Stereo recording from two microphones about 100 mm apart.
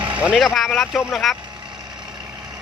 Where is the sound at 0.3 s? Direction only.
Centre (ahead or behind).